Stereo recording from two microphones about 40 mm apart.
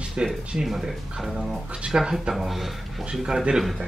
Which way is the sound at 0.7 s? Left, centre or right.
Centre.